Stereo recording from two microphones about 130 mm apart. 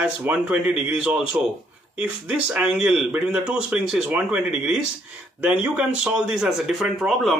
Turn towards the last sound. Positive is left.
turn(degrees=0)  # may be behind; listen again after turning